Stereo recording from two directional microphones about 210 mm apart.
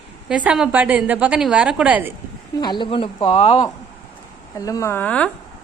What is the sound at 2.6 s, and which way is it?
Speech, 20° left (ahead or behind).